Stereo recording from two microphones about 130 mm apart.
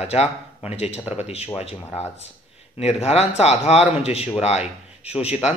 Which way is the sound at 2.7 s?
55° left (ahead or behind).